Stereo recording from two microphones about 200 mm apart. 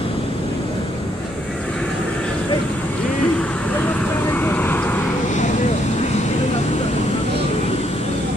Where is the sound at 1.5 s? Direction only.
5° left (ahead or behind).